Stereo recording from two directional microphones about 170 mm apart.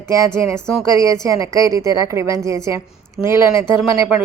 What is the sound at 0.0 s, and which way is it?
A woman's voice, 15° right (ahead or behind).